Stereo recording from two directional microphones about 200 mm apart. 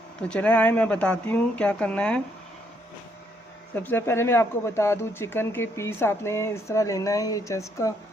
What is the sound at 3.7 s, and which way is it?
Speech, 10° left (ahead or behind).